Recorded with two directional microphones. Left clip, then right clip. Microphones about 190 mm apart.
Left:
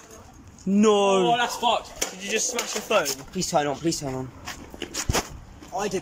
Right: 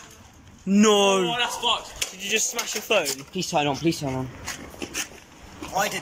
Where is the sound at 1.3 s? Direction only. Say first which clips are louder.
Left 2 dB; 50° left (ahead or behind).